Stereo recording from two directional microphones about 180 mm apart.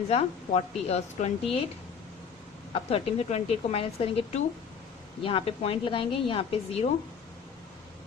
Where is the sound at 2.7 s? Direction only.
30° left (ahead or behind).